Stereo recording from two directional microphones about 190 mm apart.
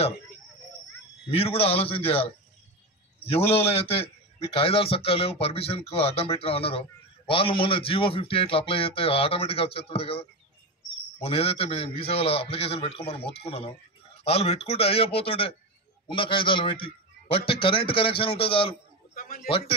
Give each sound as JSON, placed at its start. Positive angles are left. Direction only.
{"t": 1.3, "sound": "a man's voice", "side_deg": 30}
{"t": 3.7, "sound": "a man's voice", "side_deg": 30}
{"t": 19.1, "sound": "a man's voice", "side_deg": 50}